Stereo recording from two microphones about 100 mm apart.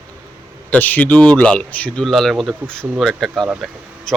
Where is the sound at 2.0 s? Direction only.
5° left (ahead or behind).